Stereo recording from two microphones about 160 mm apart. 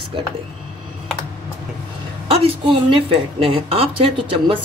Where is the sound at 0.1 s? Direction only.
30° right (ahead or behind).